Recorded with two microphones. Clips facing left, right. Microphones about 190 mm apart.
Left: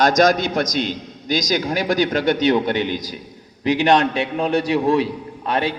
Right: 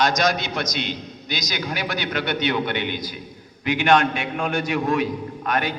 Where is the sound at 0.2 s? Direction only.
45° left (ahead or behind).